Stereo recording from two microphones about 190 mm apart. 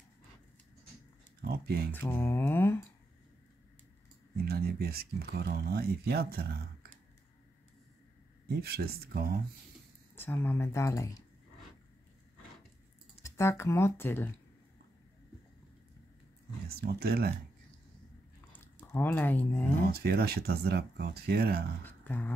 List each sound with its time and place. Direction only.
1.4 s speech: 55° right (ahead or behind)
2.0 s speech: 10° left (ahead or behind)
4.5 s speech: 55° right (ahead or behind)
8.5 s speech: 55° right (ahead or behind)
10.1 s speech: 10° left (ahead or behind)
13.2 s speech: 15° left (ahead or behind)
16.6 s speech: 55° right (ahead or behind)
18.9 s speech: 10° left (ahead or behind)
19.9 s speech: 55° right (ahead or behind)
21.8 s a sound: 10° left (ahead or behind)